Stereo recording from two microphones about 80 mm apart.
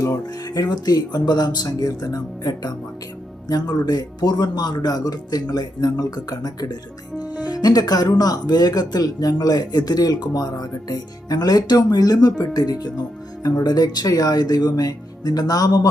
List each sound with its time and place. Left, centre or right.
0.0 s speech: left